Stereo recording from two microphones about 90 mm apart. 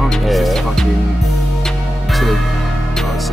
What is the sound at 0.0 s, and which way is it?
Music, centre (ahead or behind).